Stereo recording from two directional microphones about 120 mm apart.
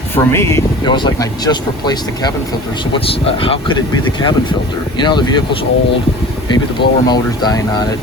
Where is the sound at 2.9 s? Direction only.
50° left (ahead or behind).